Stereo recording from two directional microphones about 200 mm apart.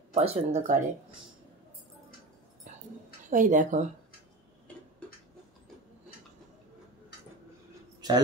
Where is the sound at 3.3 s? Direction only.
40° right (ahead or behind).